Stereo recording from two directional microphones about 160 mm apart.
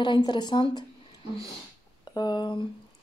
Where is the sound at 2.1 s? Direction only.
25° left (ahead or behind).